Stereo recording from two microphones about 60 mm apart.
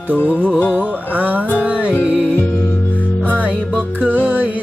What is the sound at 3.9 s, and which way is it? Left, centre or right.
Music, right.